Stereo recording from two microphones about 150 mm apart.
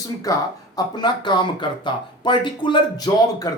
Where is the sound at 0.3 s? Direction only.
25° left (ahead or behind).